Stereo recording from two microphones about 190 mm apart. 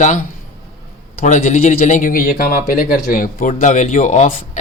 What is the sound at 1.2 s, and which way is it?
A man's voice, 40° left (ahead or behind).